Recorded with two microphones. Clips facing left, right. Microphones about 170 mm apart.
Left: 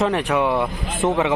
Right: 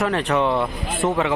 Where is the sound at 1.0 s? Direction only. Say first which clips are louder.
Left 2 dB; 20° left (ahead or behind).